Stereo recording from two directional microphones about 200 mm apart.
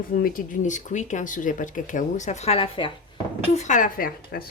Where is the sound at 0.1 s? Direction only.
45° left (ahead or behind).